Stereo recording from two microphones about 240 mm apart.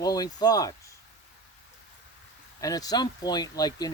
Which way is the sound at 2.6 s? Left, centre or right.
Centre.